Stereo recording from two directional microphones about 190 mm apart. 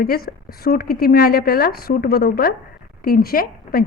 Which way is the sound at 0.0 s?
50° left (ahead or behind).